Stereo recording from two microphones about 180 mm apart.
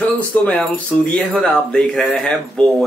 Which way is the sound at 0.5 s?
5° left (ahead or behind).